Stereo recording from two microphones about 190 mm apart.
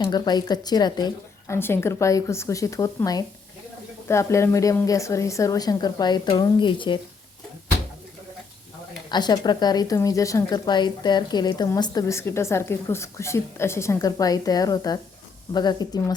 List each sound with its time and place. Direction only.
0.0 s a woman's voice: 20° left (ahead or behind)
9.0 s a woman's voice: 20° left (ahead or behind)